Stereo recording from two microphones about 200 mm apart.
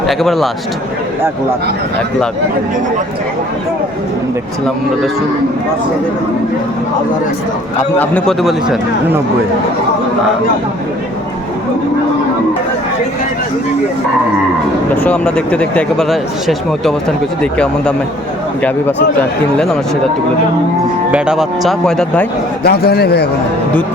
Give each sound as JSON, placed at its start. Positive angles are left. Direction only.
{"t": 0.1, "sound": "speech", "side_deg": 0}
{"t": 7.9, "sound": "speech", "side_deg": 5}
{"t": 15.0, "sound": "speech", "side_deg": 5}
{"t": 19.5, "sound": "speech", "side_deg": 0}
{"t": 21.1, "sound": "speech", "side_deg": -5}
{"t": 22.6, "sound": "a man's voice", "side_deg": 50}